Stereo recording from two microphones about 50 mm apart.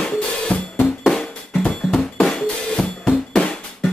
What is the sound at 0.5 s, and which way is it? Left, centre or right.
Drum, left.